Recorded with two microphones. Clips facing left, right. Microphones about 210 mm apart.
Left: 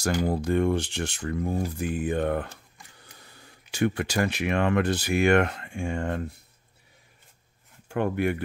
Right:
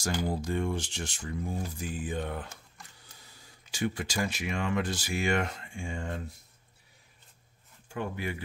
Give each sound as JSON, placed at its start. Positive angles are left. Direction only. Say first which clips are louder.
{"t": 0.3, "sound": "speech", "louder": "left 7 dB", "side_deg": 60}
{"t": 7.9, "sound": "speech", "louder": "left 9 dB", "side_deg": 60}